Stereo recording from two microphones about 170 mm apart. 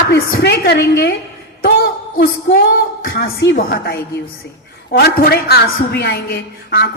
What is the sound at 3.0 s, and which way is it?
A woman's voice, 70° left (ahead or behind).